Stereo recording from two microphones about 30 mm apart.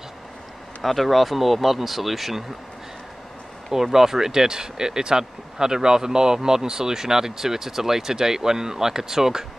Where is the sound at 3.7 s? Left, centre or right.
Centre.